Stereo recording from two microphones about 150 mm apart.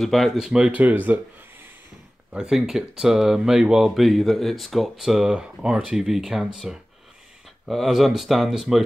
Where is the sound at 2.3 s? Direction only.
5° right (ahead or behind).